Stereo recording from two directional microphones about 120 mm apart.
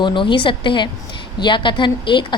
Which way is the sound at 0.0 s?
40° left (ahead or behind).